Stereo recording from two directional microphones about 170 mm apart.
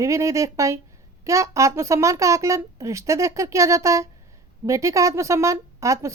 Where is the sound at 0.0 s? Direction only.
20° right (ahead or behind).